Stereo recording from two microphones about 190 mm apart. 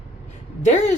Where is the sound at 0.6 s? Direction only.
35° left (ahead or behind).